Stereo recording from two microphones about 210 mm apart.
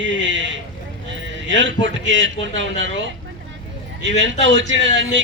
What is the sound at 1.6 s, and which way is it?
A man's voice, 60° right (ahead or behind).